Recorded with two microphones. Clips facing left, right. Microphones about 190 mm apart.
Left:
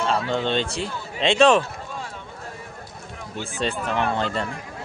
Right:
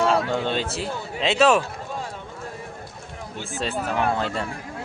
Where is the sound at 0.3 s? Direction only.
10° right (ahead or behind).